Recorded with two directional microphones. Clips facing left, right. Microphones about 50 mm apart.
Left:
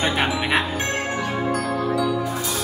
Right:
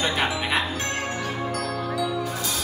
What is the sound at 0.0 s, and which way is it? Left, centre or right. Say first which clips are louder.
Music: left 3 dB; left.